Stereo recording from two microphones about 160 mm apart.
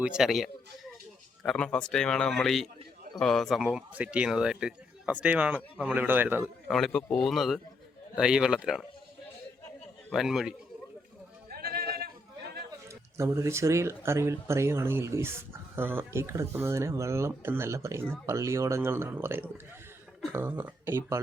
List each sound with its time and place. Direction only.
0.0 s a man's voice: 5° right (ahead or behind)
6.7 s a man's voice: centre (ahead or behind)
10.1 s a man's voice: centre (ahead or behind)
11.4 s a sound: 70° right (ahead or behind)
12.9 s speech: 15° right (ahead or behind)